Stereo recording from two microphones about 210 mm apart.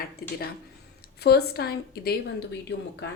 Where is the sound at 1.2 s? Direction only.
50° left (ahead or behind).